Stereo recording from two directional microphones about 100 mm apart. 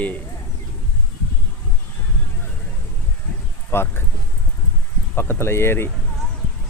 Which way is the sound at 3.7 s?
25° left (ahead or behind).